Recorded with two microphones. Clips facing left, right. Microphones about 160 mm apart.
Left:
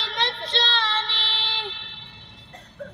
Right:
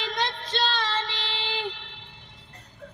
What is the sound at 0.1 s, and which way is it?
Child singing, 45° right (ahead or behind).